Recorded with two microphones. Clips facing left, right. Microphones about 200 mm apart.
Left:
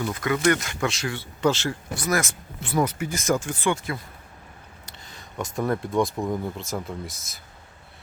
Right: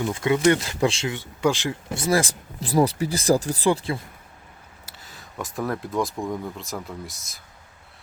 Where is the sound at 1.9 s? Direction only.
25° right (ahead or behind).